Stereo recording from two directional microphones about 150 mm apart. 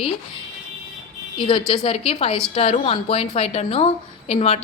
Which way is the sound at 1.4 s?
35° left (ahead or behind).